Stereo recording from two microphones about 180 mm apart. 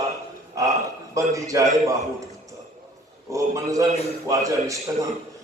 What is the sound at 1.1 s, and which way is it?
Speech, 20° right (ahead or behind).